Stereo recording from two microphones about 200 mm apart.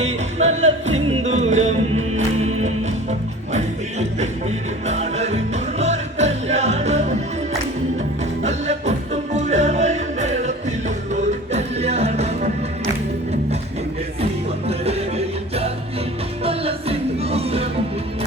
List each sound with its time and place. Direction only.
0.0 s music: 35° right (ahead or behind)
4.9 s music: 35° right (ahead or behind)
8.4 s music: 35° right (ahead or behind)
14.7 s music: 30° right (ahead or behind)